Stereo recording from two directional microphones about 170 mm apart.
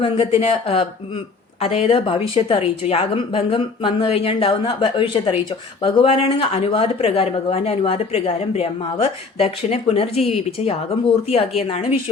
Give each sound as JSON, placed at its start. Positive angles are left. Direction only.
{"t": 0.0, "sound": "speech", "side_deg": 30}